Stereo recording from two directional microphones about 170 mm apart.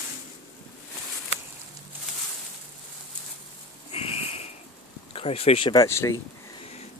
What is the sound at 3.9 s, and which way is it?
Sniff, 35° left (ahead or behind).